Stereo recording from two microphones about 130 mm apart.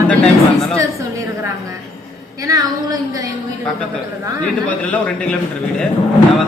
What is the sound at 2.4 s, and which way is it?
Speech, 25° right (ahead or behind).